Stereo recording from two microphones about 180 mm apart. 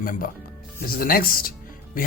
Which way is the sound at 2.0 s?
50° left (ahead or behind).